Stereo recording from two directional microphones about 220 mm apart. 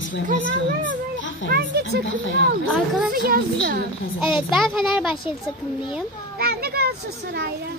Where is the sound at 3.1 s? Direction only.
45° right (ahead or behind).